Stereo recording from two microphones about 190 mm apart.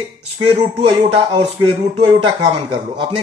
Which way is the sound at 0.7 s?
30° right (ahead or behind).